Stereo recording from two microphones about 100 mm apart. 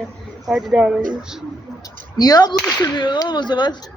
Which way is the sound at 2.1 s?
40° left (ahead or behind).